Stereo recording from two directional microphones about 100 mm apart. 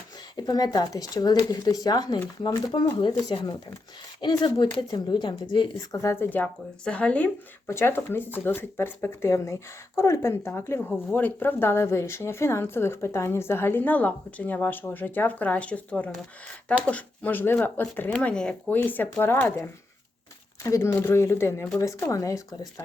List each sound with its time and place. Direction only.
0.3 s a woman's voice: 40° left (ahead or behind)
4.2 s a woman's voice: 50° left (ahead or behind)
5.9 s speech: 30° left (ahead or behind)
6.3 s speech: 15° left (ahead or behind)
7.7 s speech: 25° left (ahead or behind)